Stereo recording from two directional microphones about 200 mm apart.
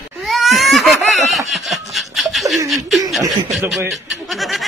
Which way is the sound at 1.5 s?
Centre (ahead or behind).